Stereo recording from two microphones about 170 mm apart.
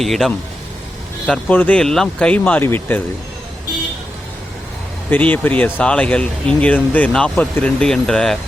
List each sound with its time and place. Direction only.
0.0 s speech: centre (ahead or behind)
5.1 s speech: 10° left (ahead or behind)